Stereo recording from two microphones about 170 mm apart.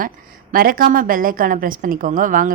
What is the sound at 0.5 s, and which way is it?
A woman's voice, 55° right (ahead or behind).